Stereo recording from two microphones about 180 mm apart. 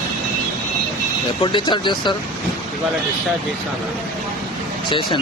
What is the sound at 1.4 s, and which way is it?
Speech, 25° left (ahead or behind).